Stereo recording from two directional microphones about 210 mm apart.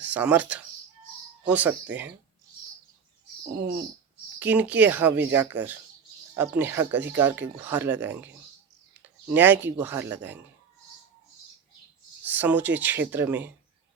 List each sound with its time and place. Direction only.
0.0 s speech: 5° right (ahead or behind)
4.4 s speech: 5° right (ahead or behind)
12.2 s speech: 10° right (ahead or behind)